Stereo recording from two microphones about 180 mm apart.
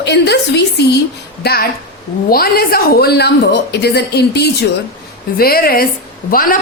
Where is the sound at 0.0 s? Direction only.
70° left (ahead or behind).